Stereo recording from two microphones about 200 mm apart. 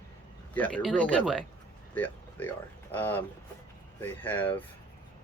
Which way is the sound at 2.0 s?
10° left (ahead or behind).